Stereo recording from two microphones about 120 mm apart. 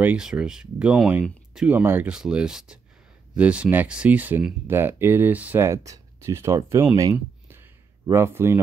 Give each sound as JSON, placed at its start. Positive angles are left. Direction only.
{"t": 0.0, "sound": "speech", "side_deg": -10}
{"t": 1.7, "sound": "speech", "side_deg": -15}
{"t": 8.1, "sound": "speech", "side_deg": -20}